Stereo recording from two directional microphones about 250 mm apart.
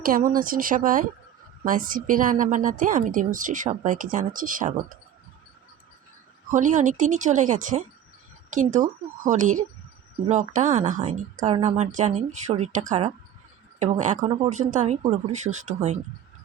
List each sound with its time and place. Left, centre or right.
0.0 s speech: right
6.5 s speech: right